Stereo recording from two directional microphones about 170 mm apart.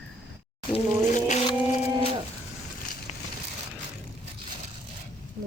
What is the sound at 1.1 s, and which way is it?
Music, 45° left (ahead or behind).